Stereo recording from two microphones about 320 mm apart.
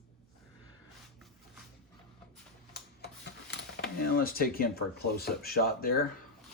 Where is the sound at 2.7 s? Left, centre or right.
Left.